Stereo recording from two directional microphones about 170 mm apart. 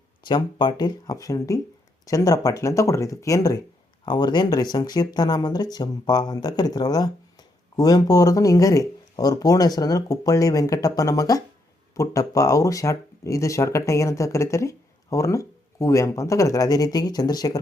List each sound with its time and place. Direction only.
0.3 s speech: 25° left (ahead or behind)